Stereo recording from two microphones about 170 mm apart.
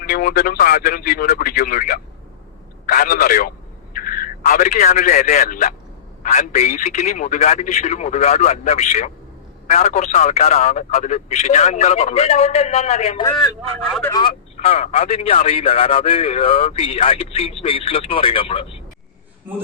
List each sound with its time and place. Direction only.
0.0 s a man's voice: 60° left (ahead or behind); by 13.2 s 40° left (ahead or behind)
14.1 s speech: 30° left (ahead or behind)